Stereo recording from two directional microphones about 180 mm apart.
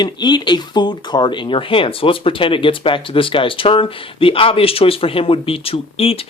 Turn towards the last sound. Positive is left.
turn(degrees=30)  # may be behind; listen again after turning